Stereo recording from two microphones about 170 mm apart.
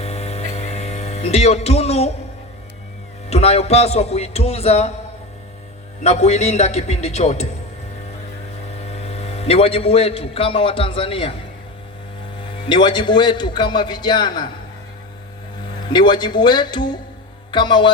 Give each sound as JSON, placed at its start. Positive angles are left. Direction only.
{"t": 0.0, "sound": "a sound", "side_deg": 40}
{"t": 3.2, "sound": "a man's voice", "side_deg": 35}
{"t": 6.0, "sound": "a man's voice", "side_deg": 40}
{"t": 8.8, "sound": "a man's voice", "side_deg": 40}
{"t": 12.6, "sound": "a man's voice", "side_deg": 30}
{"t": 15.9, "sound": "a man's voice", "side_deg": 25}